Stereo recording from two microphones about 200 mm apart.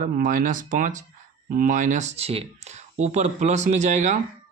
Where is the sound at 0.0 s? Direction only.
40° right (ahead or behind).